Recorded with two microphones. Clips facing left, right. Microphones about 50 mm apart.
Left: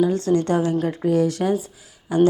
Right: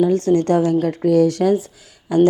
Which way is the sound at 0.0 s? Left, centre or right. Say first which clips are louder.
Right 3 dB; right.